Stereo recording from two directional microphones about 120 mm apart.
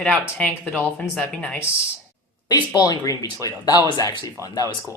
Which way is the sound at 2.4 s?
35° left (ahead or behind).